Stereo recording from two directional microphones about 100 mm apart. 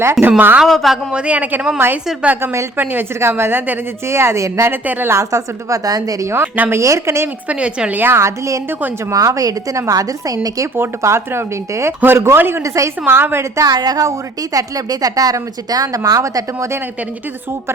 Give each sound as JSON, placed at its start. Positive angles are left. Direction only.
{"t": 0.0, "sound": "a woman's voice", "side_deg": -25}
{"t": 0.6, "sound": "a woman's voice", "side_deg": 0}
{"t": 1.1, "sound": "a woman's voice", "side_deg": -10}
{"t": 4.7, "sound": "a woman's voice", "side_deg": -20}
{"t": 5.1, "sound": "a woman's voice", "side_deg": -30}
{"t": 7.4, "sound": "a woman's voice", "side_deg": -10}
{"t": 10.8, "sound": "a woman's voice", "side_deg": -25}